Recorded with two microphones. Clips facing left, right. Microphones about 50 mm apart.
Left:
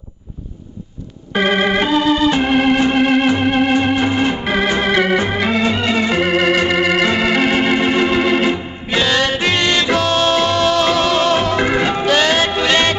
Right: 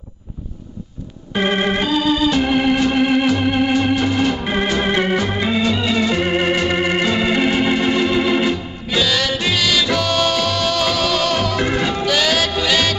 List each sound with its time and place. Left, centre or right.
1.3 s organ: left
6.7 s organ: left
7.4 s organ: left
9.6 s music: left